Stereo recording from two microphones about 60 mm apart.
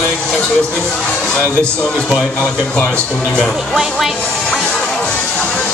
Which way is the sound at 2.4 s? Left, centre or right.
Left.